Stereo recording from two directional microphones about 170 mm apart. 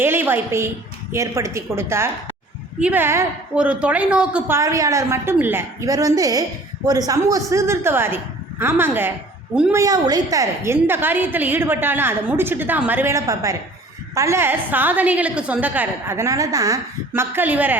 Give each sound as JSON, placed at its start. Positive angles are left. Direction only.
{"t": 0.0, "sound": "a woman's voice", "side_deg": -15}